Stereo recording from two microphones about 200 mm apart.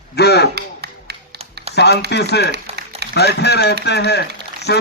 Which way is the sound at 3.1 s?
55° left (ahead or behind).